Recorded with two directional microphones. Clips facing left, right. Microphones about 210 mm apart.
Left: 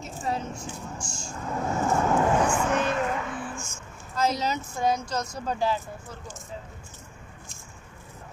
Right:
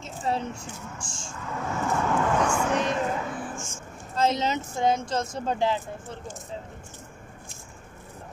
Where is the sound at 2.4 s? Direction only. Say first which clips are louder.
Even; 5° left (ahead or behind).